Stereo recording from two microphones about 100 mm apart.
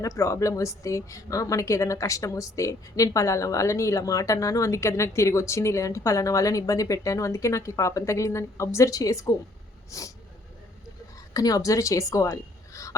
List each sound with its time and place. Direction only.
0.0 s a woman's voice: 30° left (ahead or behind)
11.3 s a woman's voice: 35° left (ahead or behind)